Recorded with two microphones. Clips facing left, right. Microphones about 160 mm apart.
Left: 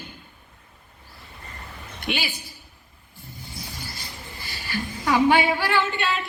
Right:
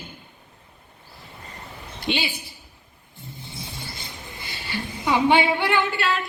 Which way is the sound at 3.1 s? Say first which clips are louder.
Right 1 dB; 25° right (ahead or behind).